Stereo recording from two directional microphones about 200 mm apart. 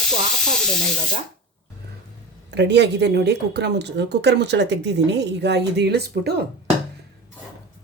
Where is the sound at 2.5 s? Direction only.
60° right (ahead or behind).